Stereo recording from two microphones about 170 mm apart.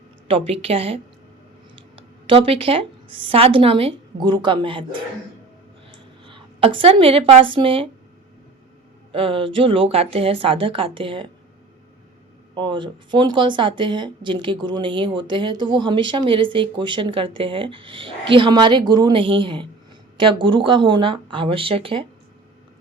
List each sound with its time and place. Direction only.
0.3 s a woman's voice: 35° right (ahead or behind)
9.1 s a woman's voice: 30° right (ahead or behind)
12.5 s a woman's voice: 30° right (ahead or behind)